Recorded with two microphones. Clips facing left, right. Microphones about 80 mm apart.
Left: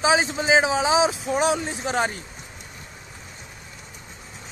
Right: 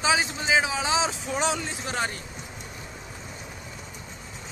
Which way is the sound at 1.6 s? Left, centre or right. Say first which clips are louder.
Left 5 dB; left.